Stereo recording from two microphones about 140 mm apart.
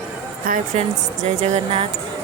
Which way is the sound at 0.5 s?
90° right.